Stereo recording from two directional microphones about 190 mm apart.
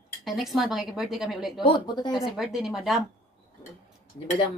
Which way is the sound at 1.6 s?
25° left (ahead or behind).